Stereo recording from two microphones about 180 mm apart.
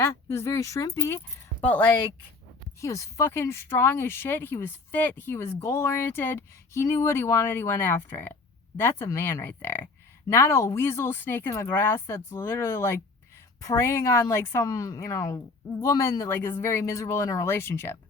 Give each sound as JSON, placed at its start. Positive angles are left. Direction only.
{"t": 0.0, "sound": "speech", "side_deg": 15}